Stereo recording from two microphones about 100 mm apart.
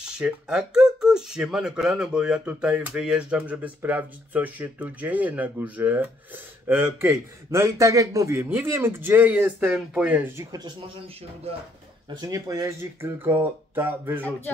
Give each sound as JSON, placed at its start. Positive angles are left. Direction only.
{"t": 0.0, "sound": "speech", "side_deg": -10}
{"t": 10.3, "sound": "speech", "side_deg": -35}
{"t": 12.2, "sound": "speech", "side_deg": -35}
{"t": 13.0, "sound": "a sound", "side_deg": -25}